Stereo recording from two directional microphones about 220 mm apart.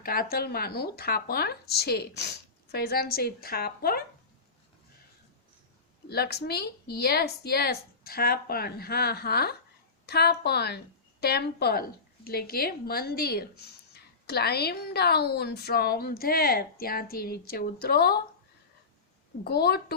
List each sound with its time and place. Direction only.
0.0 s a woman's voice: 40° left (ahead or behind)
6.1 s a woman's voice: 45° left (ahead or behind)
19.5 s a woman's voice: 45° left (ahead or behind)